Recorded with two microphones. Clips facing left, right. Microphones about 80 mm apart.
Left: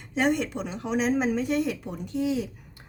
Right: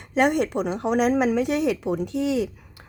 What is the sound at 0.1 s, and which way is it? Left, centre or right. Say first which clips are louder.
A woman's voice: right 4 dB; right.